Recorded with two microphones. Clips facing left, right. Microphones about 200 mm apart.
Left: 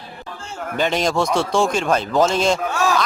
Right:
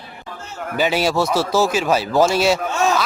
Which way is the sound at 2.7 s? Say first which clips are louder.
Right 1 dB; 20° right (ahead or behind).